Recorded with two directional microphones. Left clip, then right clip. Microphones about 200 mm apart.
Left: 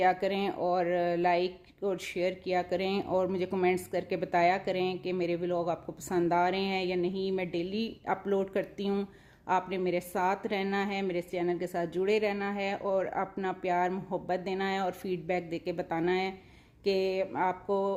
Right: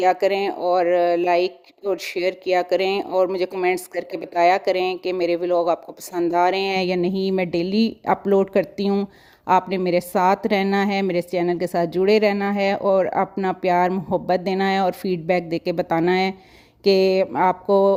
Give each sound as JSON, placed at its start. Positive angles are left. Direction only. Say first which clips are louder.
{"t": 0.0, "sound": "speech", "louder": "right 9 dB", "side_deg": -40}